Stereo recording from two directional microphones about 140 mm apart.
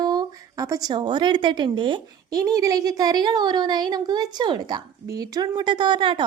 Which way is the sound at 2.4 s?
25° right (ahead or behind).